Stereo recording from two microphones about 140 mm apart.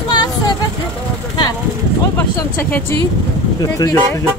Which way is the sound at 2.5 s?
10° left (ahead or behind).